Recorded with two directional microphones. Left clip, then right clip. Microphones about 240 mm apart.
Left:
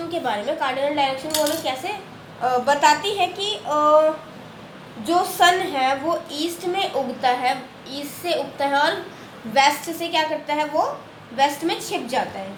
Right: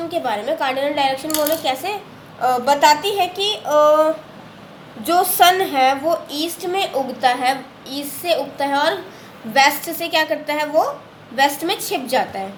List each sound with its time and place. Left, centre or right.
0.1 s a woman's voice: right
5.0 s a woman's voice: right